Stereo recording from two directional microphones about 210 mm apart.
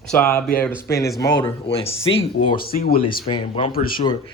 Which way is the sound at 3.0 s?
25° left (ahead or behind).